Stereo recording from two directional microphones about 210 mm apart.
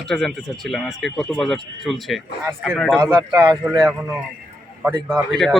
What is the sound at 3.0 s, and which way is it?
Speech, 15° right (ahead or behind).